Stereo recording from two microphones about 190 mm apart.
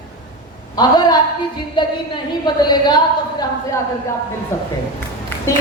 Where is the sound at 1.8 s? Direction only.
25° left (ahead or behind).